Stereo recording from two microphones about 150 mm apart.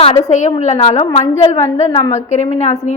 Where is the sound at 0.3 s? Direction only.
50° left (ahead or behind).